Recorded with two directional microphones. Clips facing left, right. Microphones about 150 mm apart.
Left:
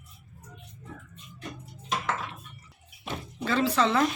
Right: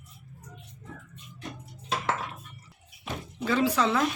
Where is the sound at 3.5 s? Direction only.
10° right (ahead or behind).